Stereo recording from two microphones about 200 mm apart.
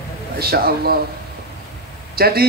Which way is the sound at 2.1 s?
50° right (ahead or behind).